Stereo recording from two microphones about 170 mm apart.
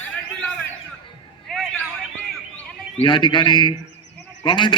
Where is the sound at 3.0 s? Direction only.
30° left (ahead or behind).